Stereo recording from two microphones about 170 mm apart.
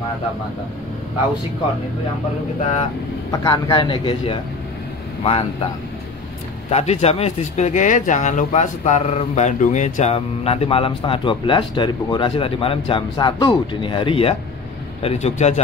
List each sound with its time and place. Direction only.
3.3 s speech: 20° left (ahead or behind)
6.7 s speech: 40° left (ahead or behind)